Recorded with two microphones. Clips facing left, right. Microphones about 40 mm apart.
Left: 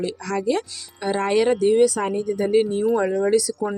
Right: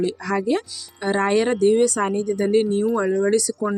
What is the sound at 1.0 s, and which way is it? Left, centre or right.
Speech, centre.